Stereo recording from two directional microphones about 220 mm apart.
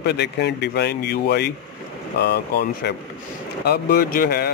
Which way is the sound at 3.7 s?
45° left (ahead or behind).